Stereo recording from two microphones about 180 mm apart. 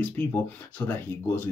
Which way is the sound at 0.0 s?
10° left (ahead or behind).